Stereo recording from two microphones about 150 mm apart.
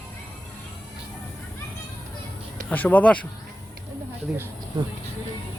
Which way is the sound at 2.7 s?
10° left (ahead or behind).